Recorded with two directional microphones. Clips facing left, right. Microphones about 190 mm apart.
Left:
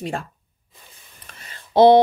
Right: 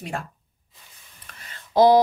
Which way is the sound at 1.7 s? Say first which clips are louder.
Left 3 dB; 30° left (ahead or behind).